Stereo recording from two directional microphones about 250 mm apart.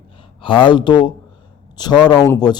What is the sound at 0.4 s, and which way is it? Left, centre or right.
A man's voice, centre.